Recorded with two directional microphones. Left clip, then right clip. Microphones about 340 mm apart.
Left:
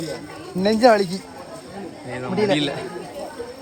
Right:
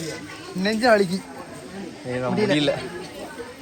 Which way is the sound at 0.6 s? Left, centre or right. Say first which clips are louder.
Left 6 dB; left.